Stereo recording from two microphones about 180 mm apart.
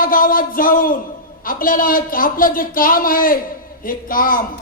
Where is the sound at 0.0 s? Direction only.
50° left (ahead or behind).